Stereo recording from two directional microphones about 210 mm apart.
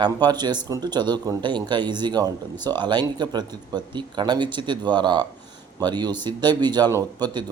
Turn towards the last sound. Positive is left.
turn(degrees=-20)  # may be behind; listen again after turning